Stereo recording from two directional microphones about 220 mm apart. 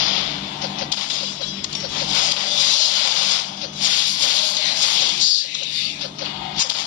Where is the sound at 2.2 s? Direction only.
35° left (ahead or behind).